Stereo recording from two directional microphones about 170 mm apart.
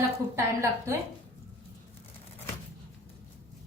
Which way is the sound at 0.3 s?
15° right (ahead or behind).